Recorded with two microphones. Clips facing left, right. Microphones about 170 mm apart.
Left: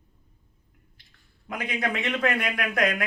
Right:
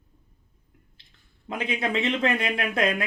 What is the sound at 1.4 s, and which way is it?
Speech, 25° right (ahead or behind).